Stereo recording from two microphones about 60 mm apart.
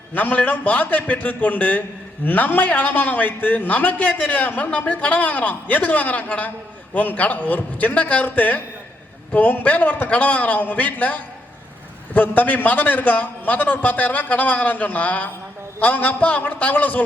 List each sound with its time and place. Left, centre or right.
0.1 s a man's voice: left